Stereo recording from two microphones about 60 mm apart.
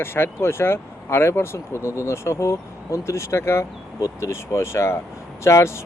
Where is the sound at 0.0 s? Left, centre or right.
Left.